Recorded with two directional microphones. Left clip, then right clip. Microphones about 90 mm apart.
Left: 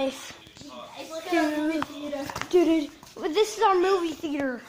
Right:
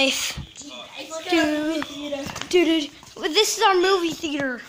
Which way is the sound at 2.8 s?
30° right (ahead or behind).